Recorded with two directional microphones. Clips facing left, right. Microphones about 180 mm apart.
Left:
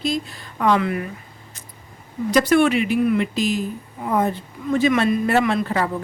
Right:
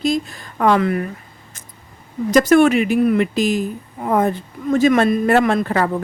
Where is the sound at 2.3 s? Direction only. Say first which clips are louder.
Right 4 dB; 45° right (ahead or behind).